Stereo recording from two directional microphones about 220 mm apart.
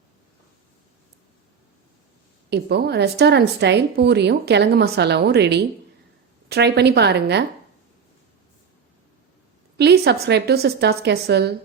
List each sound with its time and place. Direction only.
2.5 s a woman's voice: 50° right (ahead or behind)
9.7 s a woman's voice: 50° right (ahead or behind)